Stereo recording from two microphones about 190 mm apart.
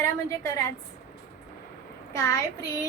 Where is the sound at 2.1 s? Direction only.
15° left (ahead or behind).